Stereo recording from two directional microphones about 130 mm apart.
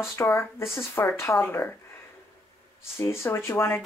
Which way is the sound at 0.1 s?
20° left (ahead or behind).